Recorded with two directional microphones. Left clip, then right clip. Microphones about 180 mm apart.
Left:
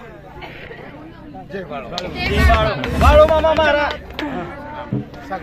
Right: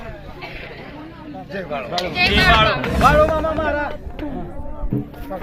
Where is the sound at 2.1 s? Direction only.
Centre (ahead or behind).